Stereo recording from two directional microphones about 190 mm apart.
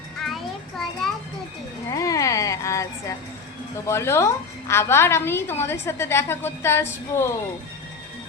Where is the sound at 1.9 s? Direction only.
15° left (ahead or behind).